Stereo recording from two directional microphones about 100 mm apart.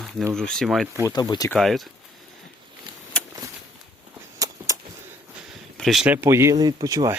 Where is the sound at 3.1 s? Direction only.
10° left (ahead or behind).